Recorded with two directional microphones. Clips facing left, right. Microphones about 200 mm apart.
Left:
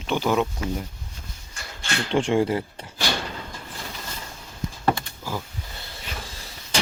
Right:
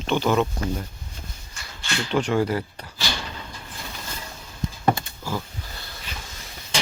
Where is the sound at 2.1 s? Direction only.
25° left (ahead or behind).